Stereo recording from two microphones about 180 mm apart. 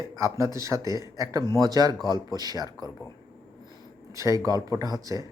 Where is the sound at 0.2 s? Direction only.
15° right (ahead or behind).